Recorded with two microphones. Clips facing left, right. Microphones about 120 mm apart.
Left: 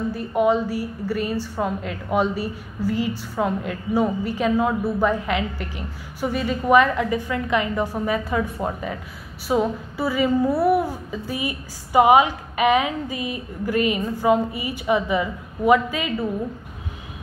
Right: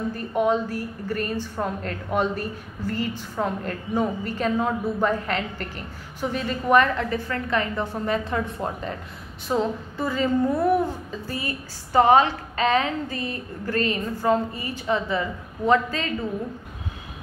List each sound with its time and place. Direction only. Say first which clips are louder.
0.1 s a woman's voice: left 3 dB; 10° left (ahead or behind)